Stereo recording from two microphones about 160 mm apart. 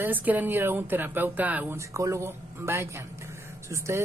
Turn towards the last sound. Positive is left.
turn(degrees=-20)  # may be behind; listen again after turning